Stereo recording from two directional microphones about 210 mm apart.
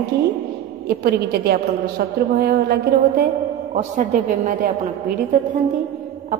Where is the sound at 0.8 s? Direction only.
50° right (ahead or behind).